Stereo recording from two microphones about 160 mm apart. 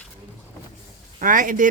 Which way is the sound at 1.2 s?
55° right (ahead or behind).